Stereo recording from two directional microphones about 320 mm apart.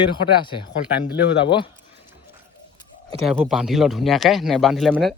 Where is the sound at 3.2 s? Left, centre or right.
Centre.